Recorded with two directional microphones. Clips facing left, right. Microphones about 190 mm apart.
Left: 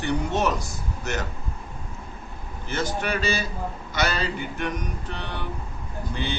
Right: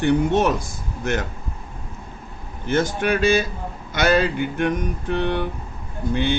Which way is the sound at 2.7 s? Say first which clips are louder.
Right 7 dB; 50° right (ahead or behind).